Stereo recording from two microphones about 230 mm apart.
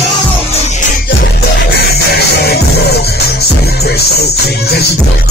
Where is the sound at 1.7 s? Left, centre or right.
Left.